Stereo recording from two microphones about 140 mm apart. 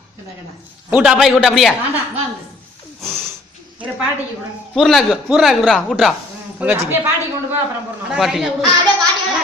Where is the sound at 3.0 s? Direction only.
Centre (ahead or behind).